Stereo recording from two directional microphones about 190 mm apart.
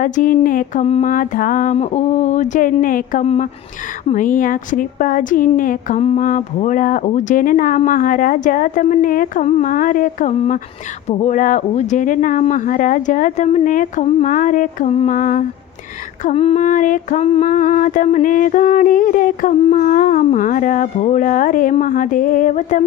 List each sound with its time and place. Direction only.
0.0 s female singing: 45° left (ahead or behind)
0.9 s a sound: 40° left (ahead or behind)
2.8 s female singing: 45° left (ahead or behind)
16.2 s female singing: 30° left (ahead or behind)